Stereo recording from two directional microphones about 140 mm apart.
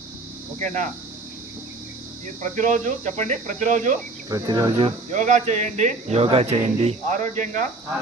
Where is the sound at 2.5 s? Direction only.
60° right (ahead or behind).